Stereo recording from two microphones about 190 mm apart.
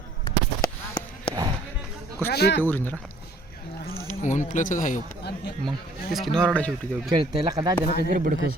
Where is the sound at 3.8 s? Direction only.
40° left (ahead or behind).